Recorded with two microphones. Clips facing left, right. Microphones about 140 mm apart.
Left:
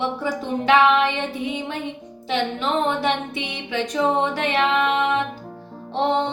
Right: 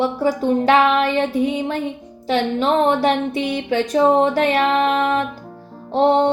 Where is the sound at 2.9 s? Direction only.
40° right (ahead or behind).